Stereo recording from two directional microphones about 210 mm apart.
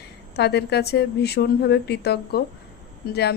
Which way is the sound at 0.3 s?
50° left (ahead or behind).